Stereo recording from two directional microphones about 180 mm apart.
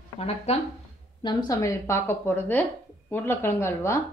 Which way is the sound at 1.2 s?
20° left (ahead or behind).